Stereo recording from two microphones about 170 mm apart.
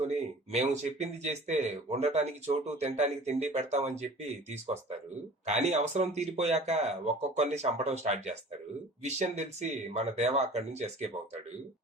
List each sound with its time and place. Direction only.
0.0 s speech: 40° right (ahead or behind)
5.5 s speech: 40° right (ahead or behind)